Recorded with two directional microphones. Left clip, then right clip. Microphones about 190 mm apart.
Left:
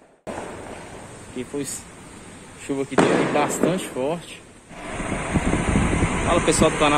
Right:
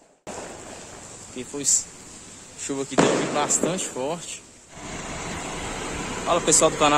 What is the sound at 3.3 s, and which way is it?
Speech, 5° right (ahead or behind).